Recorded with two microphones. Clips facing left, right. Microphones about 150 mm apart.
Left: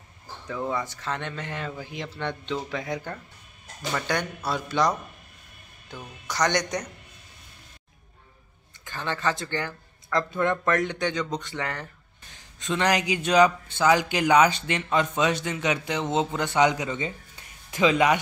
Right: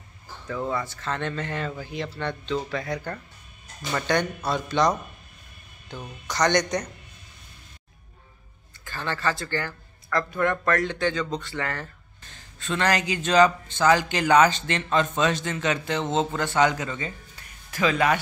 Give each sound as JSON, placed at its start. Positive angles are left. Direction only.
{"t": 0.5, "sound": "speech", "side_deg": 15}
{"t": 8.8, "sound": "speech", "side_deg": 15}